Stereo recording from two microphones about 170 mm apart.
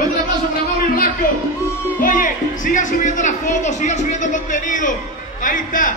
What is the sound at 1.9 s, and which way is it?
A man's voice, 50° left (ahead or behind).